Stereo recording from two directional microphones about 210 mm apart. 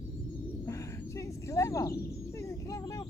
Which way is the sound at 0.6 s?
15° left (ahead or behind).